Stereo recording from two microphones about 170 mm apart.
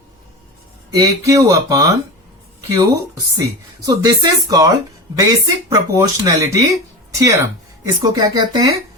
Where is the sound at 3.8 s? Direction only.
20° right (ahead or behind).